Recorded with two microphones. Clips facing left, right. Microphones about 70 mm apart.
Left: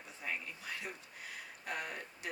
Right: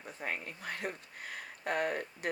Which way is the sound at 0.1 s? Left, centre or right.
Right.